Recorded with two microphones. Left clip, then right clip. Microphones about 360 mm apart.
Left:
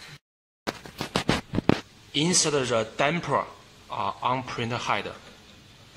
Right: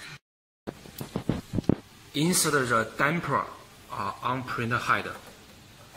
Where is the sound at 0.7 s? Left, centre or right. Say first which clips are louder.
Left 7 dB; left.